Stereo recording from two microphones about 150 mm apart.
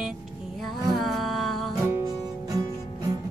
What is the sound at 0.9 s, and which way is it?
Humming, centre (ahead or behind).